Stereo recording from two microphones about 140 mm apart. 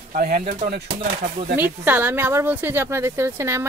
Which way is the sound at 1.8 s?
15° right (ahead or behind).